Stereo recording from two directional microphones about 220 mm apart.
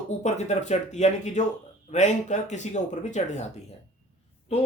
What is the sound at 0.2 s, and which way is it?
Speech, 30° left (ahead or behind).